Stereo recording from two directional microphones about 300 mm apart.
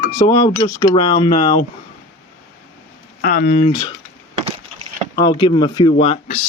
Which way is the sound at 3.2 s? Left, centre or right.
Left.